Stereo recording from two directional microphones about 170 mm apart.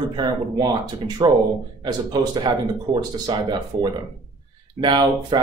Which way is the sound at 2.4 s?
25° right (ahead or behind).